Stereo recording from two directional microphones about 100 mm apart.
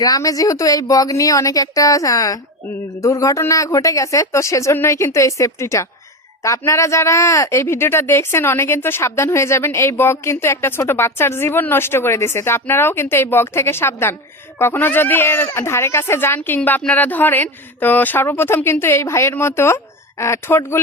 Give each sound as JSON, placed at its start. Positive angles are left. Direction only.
{"t": 0.0, "sound": "speech", "side_deg": 35}